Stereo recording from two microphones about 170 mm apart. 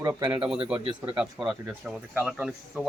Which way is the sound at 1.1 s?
Centre (ahead or behind).